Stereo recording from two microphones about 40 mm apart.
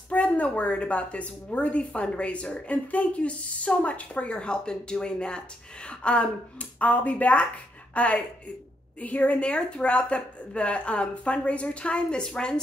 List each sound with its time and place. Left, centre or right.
0.1 s a woman's voice: left